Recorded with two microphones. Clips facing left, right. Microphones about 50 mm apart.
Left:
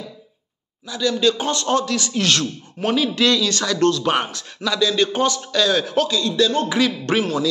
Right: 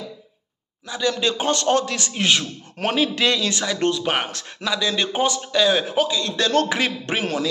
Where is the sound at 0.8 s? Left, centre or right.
Right; by 4.3 s centre.